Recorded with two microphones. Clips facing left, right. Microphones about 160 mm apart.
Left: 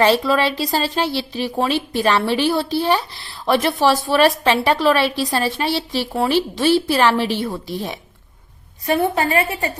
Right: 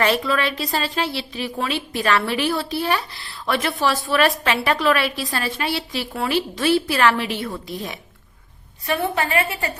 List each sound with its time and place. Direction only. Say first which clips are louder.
0.0 s a woman's voice: left 4 dB; 30° left (ahead or behind)
8.9 s a woman's voice: left 4 dB; 30° left (ahead or behind)